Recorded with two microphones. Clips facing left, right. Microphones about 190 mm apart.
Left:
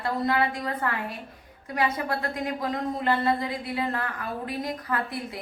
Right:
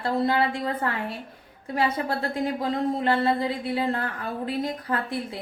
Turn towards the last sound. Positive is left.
turn(degrees=-30)  # may be behind; listen again after turning